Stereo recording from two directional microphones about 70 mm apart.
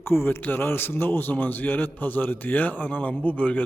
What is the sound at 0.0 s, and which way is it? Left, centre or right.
A man's voice, left.